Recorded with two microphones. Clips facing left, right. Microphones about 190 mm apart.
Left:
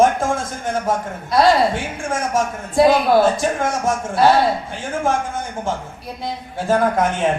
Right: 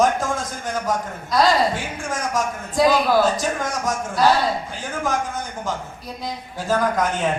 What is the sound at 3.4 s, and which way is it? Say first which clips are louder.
Speech: left 4 dB; 55° left (ahead or behind).